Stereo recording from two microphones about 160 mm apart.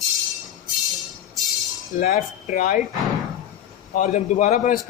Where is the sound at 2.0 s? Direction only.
60° left (ahead or behind).